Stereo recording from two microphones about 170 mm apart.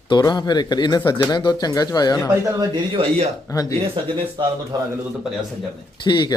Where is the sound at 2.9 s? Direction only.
35° right (ahead or behind).